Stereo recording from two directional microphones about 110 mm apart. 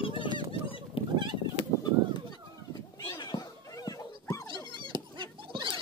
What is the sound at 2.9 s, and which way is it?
Cat, 40° left (ahead or behind).